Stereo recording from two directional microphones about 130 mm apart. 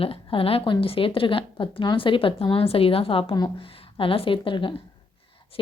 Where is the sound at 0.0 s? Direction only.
45° left (ahead or behind).